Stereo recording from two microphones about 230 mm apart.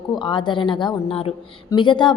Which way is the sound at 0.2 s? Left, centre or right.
Left.